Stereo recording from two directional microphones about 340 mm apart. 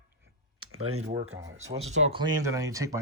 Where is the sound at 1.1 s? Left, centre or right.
Centre.